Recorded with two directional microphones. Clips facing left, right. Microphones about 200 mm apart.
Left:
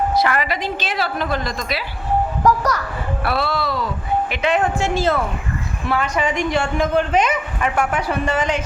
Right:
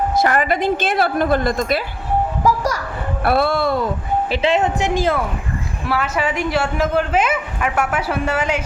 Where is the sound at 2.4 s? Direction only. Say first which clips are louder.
Left 1 dB; 10° right (ahead or behind).